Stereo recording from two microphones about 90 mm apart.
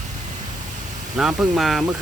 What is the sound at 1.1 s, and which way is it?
Speech, 5° right (ahead or behind).